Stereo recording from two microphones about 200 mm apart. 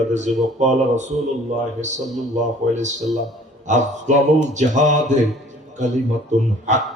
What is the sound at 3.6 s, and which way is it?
Speech, 35° right (ahead or behind).